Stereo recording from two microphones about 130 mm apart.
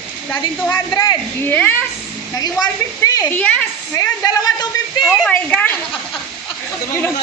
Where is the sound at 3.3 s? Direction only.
10° left (ahead or behind).